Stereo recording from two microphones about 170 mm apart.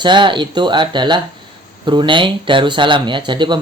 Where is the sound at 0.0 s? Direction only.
30° right (ahead or behind).